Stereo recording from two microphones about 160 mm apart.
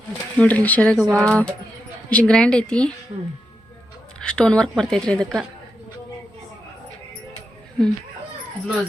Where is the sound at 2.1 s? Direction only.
5° left (ahead or behind).